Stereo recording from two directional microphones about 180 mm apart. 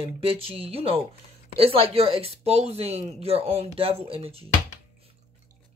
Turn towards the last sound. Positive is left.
turn(degrees=-30)  # may be behind; listen again after turning